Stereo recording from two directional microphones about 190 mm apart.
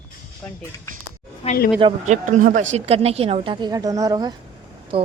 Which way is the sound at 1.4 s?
30° left (ahead or behind).